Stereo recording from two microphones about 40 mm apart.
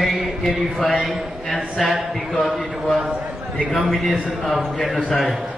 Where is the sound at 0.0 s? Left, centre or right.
Centre.